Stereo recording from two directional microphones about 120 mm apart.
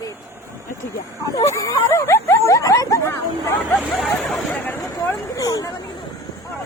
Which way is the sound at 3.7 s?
Centre (ahead or behind).